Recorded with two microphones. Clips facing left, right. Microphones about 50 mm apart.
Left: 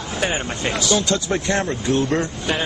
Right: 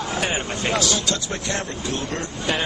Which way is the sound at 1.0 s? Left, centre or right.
Left.